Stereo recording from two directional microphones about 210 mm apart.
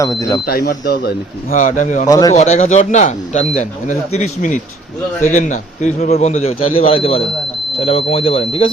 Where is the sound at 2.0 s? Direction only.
15° left (ahead or behind).